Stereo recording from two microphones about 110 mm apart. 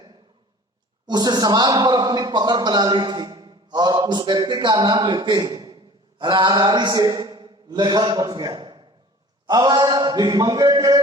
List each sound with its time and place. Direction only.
1.0 s a man's voice: 40° right (ahead or behind)